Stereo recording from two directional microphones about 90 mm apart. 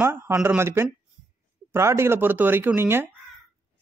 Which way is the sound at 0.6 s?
25° right (ahead or behind).